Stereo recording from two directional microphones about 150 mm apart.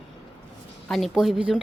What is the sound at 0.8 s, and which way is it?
Speech, centre (ahead or behind).